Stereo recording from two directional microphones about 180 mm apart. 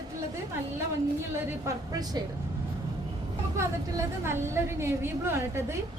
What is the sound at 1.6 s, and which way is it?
Speech, 20° right (ahead or behind).